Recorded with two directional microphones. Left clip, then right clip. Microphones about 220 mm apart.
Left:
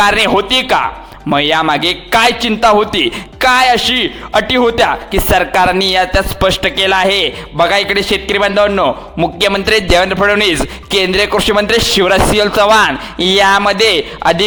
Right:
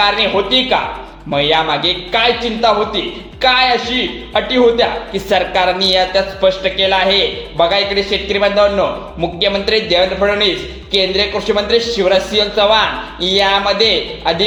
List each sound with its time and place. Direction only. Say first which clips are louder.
0.0 s a man's voice: left 3 dB; 45° left (ahead or behind)